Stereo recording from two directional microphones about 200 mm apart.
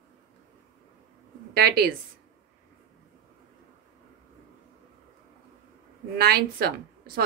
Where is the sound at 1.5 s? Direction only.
50° right (ahead or behind).